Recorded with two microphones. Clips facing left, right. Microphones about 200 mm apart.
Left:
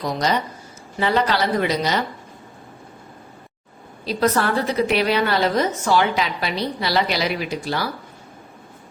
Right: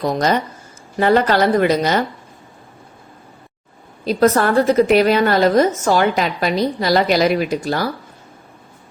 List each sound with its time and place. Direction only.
0.0 s a woman's voice: 50° right (ahead or behind)
4.0 s a woman's voice: 50° right (ahead or behind)